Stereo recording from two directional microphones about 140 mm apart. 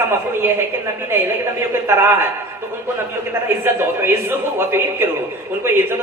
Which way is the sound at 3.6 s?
15° right (ahead or behind).